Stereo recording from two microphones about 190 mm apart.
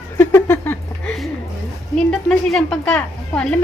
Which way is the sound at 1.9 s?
Centre (ahead or behind).